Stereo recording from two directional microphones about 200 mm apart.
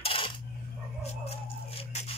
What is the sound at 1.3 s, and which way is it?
Music, 30° left (ahead or behind).